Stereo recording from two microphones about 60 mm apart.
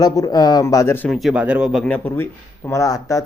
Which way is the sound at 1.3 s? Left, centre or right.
Right.